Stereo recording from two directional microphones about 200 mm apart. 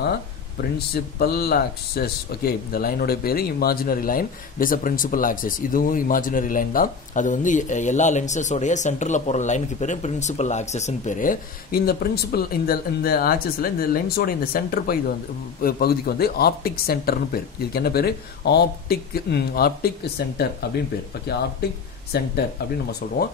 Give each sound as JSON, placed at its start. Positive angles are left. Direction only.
{"t": 0.6, "sound": "speech", "side_deg": 50}
{"t": 21.3, "sound": "speech", "side_deg": 55}